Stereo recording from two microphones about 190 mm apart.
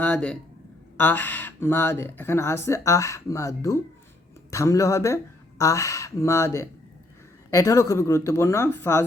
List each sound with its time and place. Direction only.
0.0 s speech: 5° left (ahead or behind)